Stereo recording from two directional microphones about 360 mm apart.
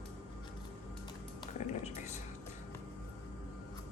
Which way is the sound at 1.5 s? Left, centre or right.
Centre.